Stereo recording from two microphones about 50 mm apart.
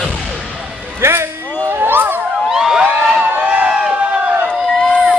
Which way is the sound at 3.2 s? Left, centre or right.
Right.